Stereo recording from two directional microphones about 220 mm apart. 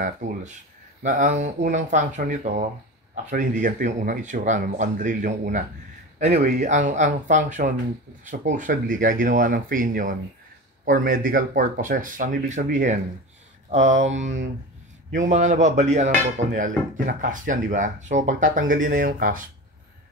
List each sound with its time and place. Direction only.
0.2 s a sound: 35° right (ahead or behind)
1.0 s speech: 35° right (ahead or behind)
14.2 s speech: 55° right (ahead or behind)
15.1 s speech: 35° right (ahead or behind)